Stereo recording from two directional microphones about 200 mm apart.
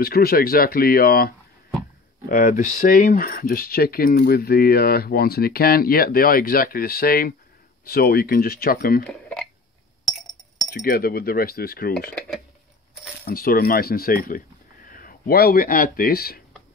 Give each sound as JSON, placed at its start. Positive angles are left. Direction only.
{"t": 0.0, "sound": "speech", "side_deg": 50}
{"t": 9.0, "sound": "a sound", "side_deg": 5}
{"t": 10.7, "sound": "speech", "side_deg": 50}
{"t": 13.2, "sound": "speech", "side_deg": 45}